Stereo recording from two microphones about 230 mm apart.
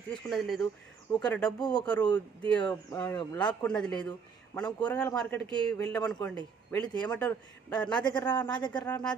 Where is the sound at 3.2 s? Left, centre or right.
Centre.